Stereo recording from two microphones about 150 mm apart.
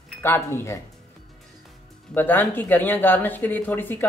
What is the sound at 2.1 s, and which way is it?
Speech, 10° left (ahead or behind).